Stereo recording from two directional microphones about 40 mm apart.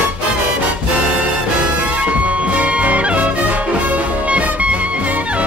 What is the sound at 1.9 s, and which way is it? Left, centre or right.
Music, right.